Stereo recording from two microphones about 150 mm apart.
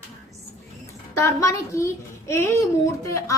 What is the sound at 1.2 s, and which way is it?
Speech, 20° left (ahead or behind).